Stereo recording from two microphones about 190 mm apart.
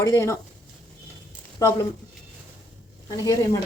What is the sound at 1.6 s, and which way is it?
Speech, 20° left (ahead or behind).